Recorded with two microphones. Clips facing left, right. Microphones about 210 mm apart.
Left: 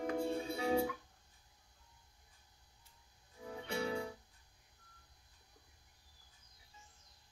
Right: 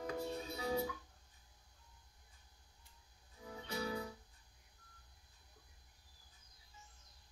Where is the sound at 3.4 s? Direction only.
30° left (ahead or behind).